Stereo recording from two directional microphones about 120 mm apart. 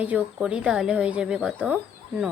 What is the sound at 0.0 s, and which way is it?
A woman's voice, 10° right (ahead or behind).